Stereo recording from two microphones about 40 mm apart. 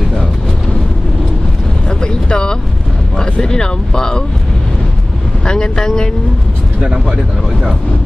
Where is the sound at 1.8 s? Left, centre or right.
Left.